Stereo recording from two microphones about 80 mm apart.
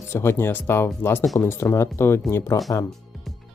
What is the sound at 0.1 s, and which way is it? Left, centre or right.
Speech, left.